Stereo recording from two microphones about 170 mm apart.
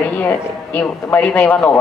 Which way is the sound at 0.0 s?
10° left (ahead or behind).